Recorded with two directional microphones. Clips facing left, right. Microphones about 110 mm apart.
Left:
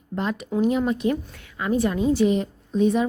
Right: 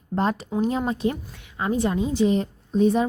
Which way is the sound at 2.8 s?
30° right (ahead or behind).